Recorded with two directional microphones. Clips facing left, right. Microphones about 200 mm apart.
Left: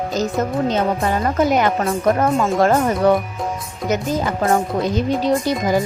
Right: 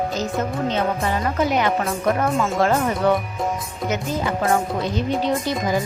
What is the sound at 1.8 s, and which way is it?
Speech, 35° left (ahead or behind).